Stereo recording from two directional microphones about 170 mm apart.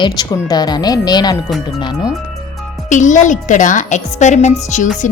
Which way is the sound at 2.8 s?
45° left (ahead or behind).